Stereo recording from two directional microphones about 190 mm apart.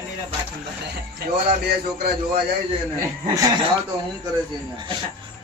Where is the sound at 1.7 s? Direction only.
55° right (ahead or behind).